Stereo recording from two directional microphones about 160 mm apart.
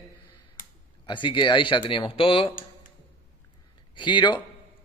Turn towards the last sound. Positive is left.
turn(degrees=30)  # may be behind; listen again after turning